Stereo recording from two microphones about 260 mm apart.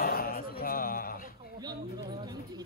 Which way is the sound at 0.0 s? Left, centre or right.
Left.